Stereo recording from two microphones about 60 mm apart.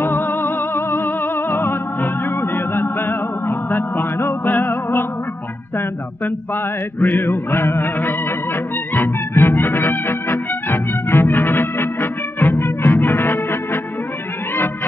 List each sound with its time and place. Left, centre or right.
0.0 s music: left
6.2 s music: left